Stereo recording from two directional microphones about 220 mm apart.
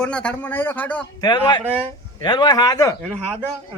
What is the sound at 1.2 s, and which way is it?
Speech, 20° left (ahead or behind).